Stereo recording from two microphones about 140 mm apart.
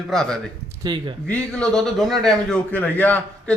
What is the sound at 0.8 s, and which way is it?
Speech, 30° right (ahead or behind).